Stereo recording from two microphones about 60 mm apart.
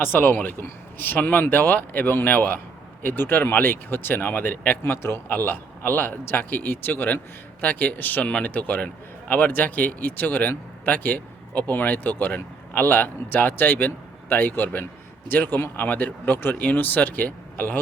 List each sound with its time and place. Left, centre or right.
0.0 s speech: left
4.8 s speech: left
5.3 s speech: left